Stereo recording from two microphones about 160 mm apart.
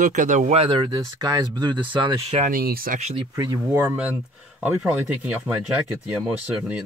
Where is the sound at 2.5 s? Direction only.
70° right (ahead or behind).